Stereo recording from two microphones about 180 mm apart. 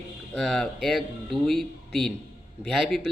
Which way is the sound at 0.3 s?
Centre (ahead or behind).